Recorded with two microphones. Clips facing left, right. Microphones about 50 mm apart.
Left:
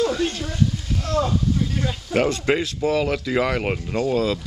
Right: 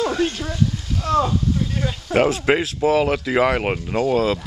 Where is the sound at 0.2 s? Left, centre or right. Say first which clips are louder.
Right 2 dB; right.